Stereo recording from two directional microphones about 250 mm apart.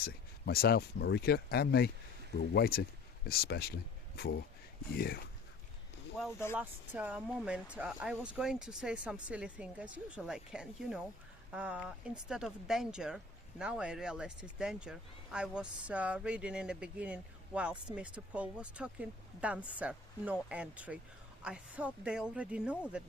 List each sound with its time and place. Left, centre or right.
0.0 s speech: left
6.1 s speech: centre
6.6 s speech: centre